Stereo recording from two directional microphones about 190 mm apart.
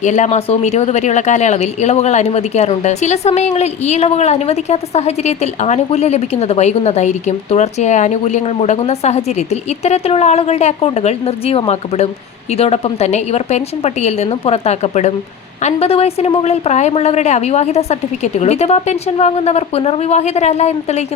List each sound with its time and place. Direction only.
0.0 s speech: 40° left (ahead or behind)